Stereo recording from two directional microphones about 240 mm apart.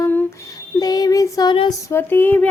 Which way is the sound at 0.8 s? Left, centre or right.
Centre.